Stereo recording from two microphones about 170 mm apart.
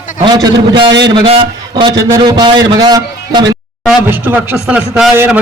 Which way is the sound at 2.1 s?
25° right (ahead or behind).